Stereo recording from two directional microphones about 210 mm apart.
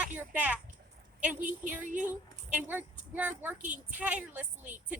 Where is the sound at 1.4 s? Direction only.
35° right (ahead or behind).